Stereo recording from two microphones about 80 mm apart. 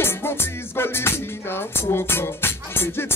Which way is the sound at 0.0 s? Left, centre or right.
Left.